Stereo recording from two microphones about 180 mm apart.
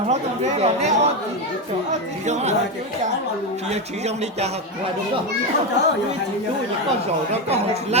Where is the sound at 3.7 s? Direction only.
35° right (ahead or behind).